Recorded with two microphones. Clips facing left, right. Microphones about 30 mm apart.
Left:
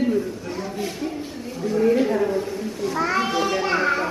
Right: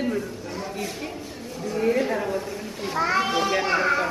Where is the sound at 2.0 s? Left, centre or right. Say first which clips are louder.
Left 4 dB; centre.